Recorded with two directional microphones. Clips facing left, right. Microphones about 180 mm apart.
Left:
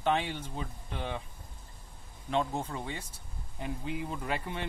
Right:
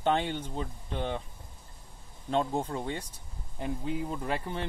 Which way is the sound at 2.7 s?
40° right (ahead or behind).